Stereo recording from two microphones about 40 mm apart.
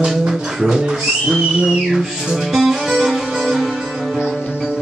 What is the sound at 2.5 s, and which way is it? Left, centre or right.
Music, centre.